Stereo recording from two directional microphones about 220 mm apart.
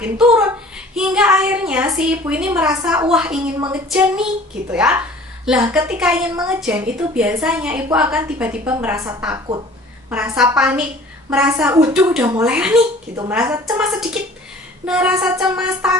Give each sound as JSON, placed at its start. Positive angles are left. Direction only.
{"t": 0.0, "sound": "child singing", "side_deg": -5}
{"t": 2.0, "sound": "a woman's voice", "side_deg": -5}